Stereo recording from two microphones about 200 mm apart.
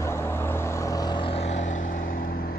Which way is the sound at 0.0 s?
15° left (ahead or behind).